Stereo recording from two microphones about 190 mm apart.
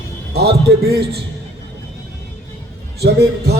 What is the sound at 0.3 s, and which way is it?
Speech, 55° right (ahead or behind).